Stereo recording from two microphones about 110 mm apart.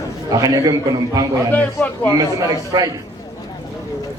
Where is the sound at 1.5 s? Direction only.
15° left (ahead or behind).